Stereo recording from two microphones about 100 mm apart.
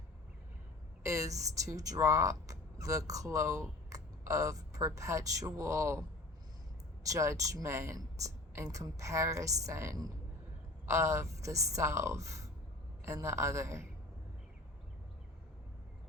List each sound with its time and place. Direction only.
1.0 s speech: 35° right (ahead or behind)
7.1 s a woman's voice: 30° right (ahead or behind)